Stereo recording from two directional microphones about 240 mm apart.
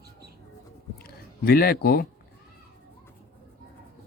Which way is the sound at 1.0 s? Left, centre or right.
Left.